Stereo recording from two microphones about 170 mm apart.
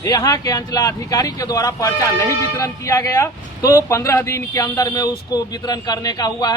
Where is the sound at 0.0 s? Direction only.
20° left (ahead or behind).